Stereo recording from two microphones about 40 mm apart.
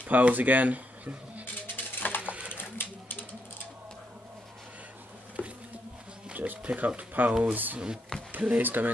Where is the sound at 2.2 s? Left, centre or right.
Right.